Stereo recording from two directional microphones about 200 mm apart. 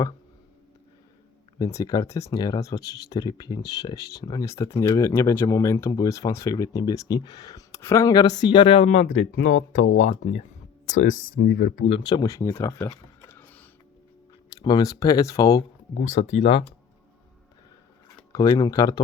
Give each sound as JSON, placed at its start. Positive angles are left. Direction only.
{"t": 1.5, "sound": "speech", "side_deg": 20}
{"t": 10.8, "sound": "speech", "side_deg": 75}
{"t": 11.4, "sound": "speech", "side_deg": 45}
{"t": 11.9, "sound": "speech", "side_deg": 25}
{"t": 16.0, "sound": "speech", "side_deg": 35}
{"t": 18.3, "sound": "speech", "side_deg": 20}